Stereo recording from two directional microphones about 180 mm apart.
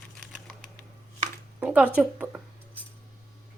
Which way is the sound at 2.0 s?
5° right (ahead or behind).